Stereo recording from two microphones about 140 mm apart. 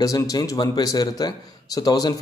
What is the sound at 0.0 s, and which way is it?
A man's voice, 25° left (ahead or behind).